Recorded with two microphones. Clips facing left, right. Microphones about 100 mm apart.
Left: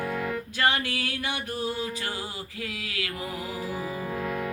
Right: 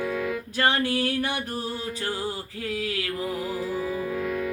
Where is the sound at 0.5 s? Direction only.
35° right (ahead or behind).